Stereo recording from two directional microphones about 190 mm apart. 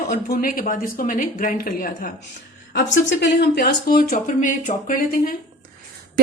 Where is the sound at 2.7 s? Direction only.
65° left (ahead or behind); by 5.3 s 45° left (ahead or behind).